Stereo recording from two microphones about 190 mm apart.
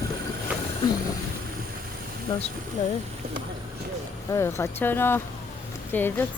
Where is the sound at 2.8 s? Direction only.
45° left (ahead or behind).